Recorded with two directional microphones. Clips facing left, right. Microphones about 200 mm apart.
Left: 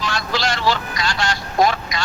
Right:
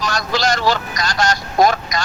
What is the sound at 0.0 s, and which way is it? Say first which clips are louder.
Speech: right 3 dB; 45° right (ahead or behind).